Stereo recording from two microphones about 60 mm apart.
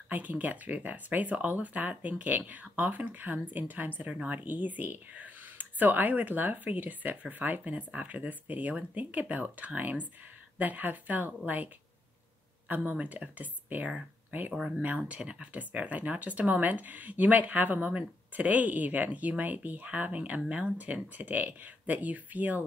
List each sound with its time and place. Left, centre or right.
0.1 s speech: right